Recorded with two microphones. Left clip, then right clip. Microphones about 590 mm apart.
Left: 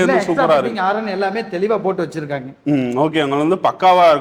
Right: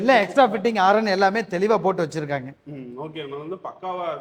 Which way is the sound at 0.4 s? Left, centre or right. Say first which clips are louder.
Left 4 dB; centre.